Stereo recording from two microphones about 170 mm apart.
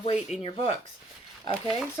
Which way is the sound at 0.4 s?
35° left (ahead or behind).